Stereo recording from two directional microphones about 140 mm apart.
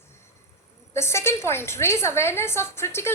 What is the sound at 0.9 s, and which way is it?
A woman's voice, 20° left (ahead or behind).